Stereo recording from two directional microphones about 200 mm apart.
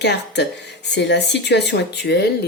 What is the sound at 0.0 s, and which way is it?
Speech, 60° left (ahead or behind).